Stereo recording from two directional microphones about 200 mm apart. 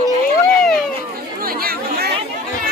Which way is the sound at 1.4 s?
50° right (ahead or behind).